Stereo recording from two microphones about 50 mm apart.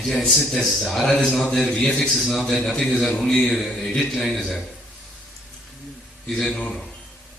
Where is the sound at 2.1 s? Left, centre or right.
Centre.